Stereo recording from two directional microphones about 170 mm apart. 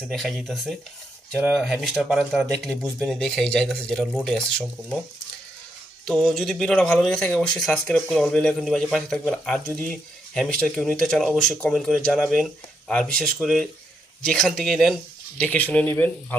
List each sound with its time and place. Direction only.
0.1 s speech: centre (ahead or behind)
6.1 s speech: centre (ahead or behind)